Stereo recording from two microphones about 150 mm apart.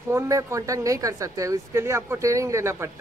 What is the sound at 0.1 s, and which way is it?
Speech, 20° right (ahead or behind).